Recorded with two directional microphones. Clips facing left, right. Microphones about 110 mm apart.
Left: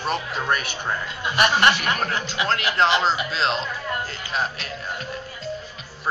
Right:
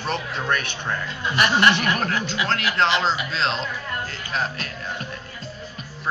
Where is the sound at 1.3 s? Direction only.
25° left (ahead or behind).